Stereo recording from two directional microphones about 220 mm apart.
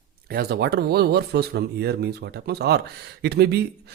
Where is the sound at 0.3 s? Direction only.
45° right (ahead or behind).